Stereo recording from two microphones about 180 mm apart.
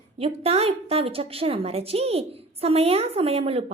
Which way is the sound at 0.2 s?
35° right (ahead or behind).